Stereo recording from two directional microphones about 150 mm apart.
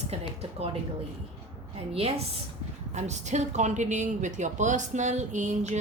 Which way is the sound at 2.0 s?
45° right (ahead or behind).